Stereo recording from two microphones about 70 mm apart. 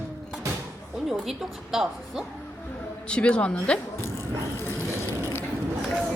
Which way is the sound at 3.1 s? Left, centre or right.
Centre.